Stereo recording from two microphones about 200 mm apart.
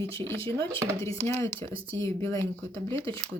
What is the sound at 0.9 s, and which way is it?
Speech, 10° left (ahead or behind).